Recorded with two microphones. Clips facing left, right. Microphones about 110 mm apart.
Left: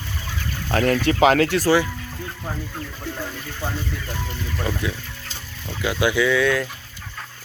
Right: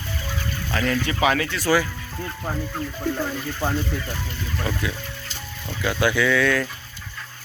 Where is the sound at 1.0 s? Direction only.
70° left (ahead or behind).